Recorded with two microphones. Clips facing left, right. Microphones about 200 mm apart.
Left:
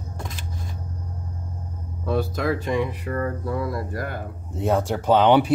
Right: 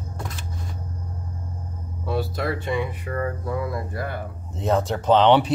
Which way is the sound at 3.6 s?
40° left (ahead or behind).